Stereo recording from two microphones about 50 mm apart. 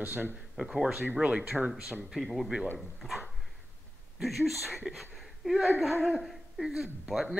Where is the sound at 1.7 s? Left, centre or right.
Centre.